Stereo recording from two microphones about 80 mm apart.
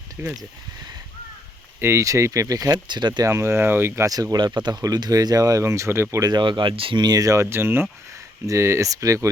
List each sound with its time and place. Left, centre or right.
0.2 s speech: right
1.8 s speech: right
2.8 s speech: right
3.2 s speech: right
4.0 s speech: right
6.1 s speech: right
7.2 s speech: right